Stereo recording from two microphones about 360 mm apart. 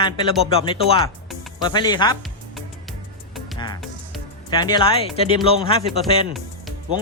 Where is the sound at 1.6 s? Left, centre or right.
Centre.